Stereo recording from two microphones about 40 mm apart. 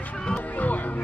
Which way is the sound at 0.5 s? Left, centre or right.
Left.